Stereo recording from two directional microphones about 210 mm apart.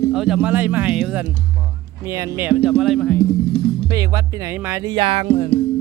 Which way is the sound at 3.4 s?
25° left (ahead or behind).